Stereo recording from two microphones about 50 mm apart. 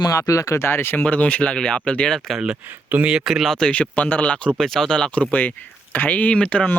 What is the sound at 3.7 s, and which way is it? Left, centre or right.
Speech, left.